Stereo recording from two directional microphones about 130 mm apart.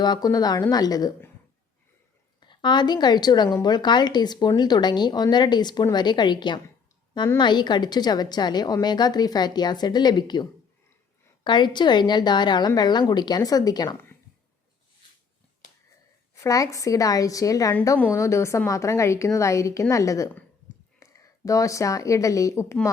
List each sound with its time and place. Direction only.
0.0 s a woman's voice: 30° left (ahead or behind)
2.5 s a woman's voice: 35° left (ahead or behind)
11.4 s a woman's voice: 35° left (ahead or behind)
16.3 s a woman's voice: 25° left (ahead or behind)